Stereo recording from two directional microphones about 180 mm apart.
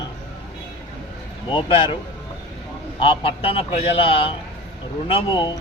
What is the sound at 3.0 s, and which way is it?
A man's voice, 30° left (ahead or behind).